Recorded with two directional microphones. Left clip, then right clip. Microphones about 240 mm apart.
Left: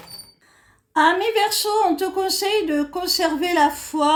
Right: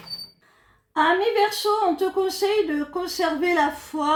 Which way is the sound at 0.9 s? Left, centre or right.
Left.